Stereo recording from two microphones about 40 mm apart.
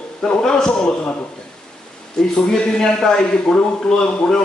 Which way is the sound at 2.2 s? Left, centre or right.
Centre.